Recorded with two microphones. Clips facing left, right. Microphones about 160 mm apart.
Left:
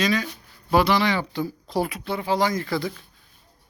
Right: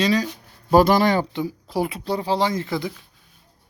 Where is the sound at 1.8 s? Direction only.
30° right (ahead or behind).